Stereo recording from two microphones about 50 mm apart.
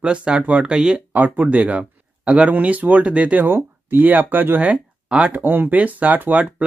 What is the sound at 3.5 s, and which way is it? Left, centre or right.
Speech, right.